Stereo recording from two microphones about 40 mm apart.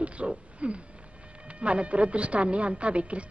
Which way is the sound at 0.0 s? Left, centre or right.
Right.